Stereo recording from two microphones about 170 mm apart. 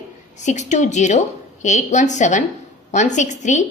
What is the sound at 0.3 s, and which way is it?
A woman's voice, 45° left (ahead or behind).